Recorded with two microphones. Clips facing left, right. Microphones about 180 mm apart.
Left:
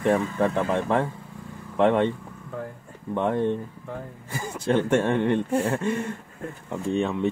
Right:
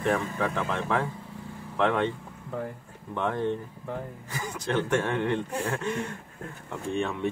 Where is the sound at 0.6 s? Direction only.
20° left (ahead or behind).